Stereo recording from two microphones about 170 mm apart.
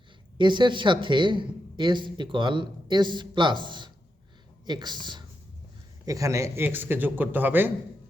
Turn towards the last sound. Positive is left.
turn(degrees=-10)  # may be behind; listen again after turning